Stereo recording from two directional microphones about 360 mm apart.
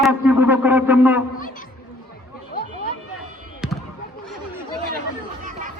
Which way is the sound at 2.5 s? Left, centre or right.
Left.